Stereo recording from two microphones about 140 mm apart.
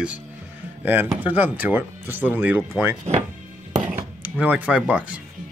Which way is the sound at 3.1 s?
50° right (ahead or behind).